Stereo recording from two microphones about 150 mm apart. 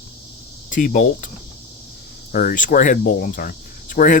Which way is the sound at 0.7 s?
60° left (ahead or behind).